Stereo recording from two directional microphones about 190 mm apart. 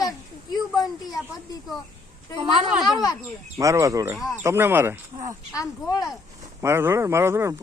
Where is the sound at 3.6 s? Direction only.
15° right (ahead or behind).